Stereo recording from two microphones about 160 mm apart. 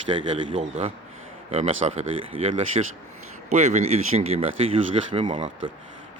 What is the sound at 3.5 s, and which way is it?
Speech, 45° right (ahead or behind).